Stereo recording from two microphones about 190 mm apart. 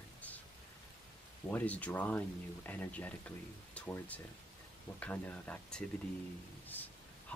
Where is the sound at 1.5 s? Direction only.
10° left (ahead or behind).